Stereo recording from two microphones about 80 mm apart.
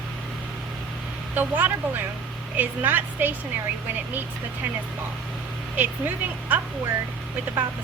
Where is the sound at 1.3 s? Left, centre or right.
Right.